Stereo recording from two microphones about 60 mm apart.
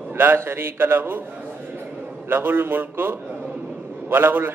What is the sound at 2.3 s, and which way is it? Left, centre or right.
A man's voice, right.